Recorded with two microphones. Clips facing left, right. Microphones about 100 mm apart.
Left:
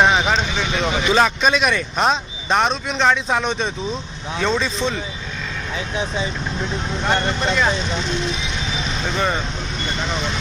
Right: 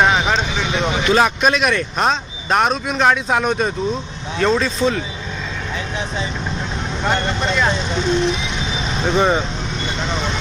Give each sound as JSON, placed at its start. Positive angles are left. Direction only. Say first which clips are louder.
{"t": 0.0, "sound": "vehicle", "louder": "even", "side_deg": 0}
{"t": 1.2, "sound": "speech", "louder": "right 1 dB", "side_deg": -5}
{"t": 7.0, "sound": "speech", "louder": "right 1 dB", "side_deg": 0}
{"t": 9.0, "sound": "speech", "louder": "right 6 dB", "side_deg": -20}